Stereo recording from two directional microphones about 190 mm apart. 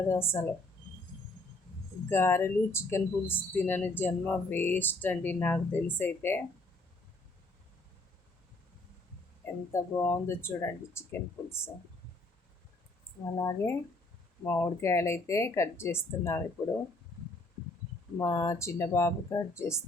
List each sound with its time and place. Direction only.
0.1 s speech: 15° left (ahead or behind)
2.0 s speech: 10° left (ahead or behind)
9.7 s speech: 15° left (ahead or behind)
13.4 s speech: 15° left (ahead or behind)
18.2 s speech: 15° left (ahead or behind)